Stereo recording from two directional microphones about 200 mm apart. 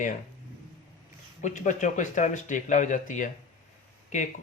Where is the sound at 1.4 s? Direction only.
40° left (ahead or behind).